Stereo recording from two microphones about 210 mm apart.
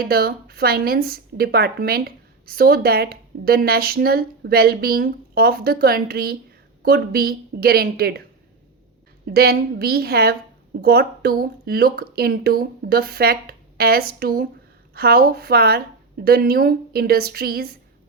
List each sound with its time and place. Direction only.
0.0 s a woman's voice: 45° right (ahead or behind)
9.2 s a woman's voice: 45° right (ahead or behind)